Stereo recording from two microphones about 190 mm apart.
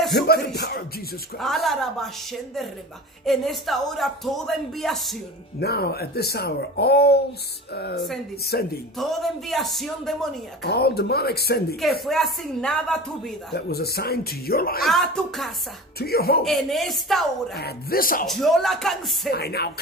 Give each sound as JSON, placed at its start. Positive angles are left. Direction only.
{"t": 0.3, "sound": "speech", "side_deg": 60}
{"t": 1.4, "sound": "speech", "side_deg": 0}
{"t": 3.3, "sound": "speech", "side_deg": 0}
{"t": 5.6, "sound": "speech", "side_deg": 55}
{"t": 8.9, "sound": "speech", "side_deg": 0}
{"t": 10.6, "sound": "speech", "side_deg": 60}
{"t": 11.7, "sound": "speech", "side_deg": 0}
{"t": 13.6, "sound": "speech", "side_deg": 55}
{"t": 14.9, "sound": "speech", "side_deg": 0}
{"t": 16.0, "sound": "speech", "side_deg": 55}
{"t": 16.4, "sound": "speech", "side_deg": 0}
{"t": 17.6, "sound": "speech", "side_deg": 55}
{"t": 18.2, "sound": "speech", "side_deg": 0}
{"t": 19.3, "sound": "speech", "side_deg": 55}